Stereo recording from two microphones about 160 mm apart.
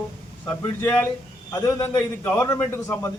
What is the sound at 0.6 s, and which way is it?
A man's voice, 10° left (ahead or behind).